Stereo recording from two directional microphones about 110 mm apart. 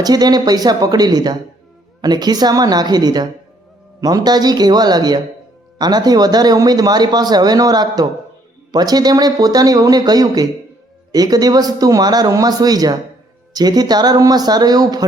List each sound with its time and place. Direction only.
0.0 s speech: 40° right (ahead or behind)